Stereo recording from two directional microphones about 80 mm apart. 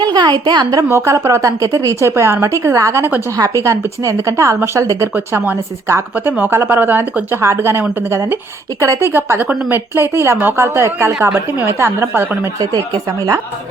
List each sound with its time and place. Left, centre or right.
0.0 s a woman's voice: right
0.9 s a woman's voice: right
6.1 s speech: right
7.4 s a woman's voice: right
12.5 s speech: right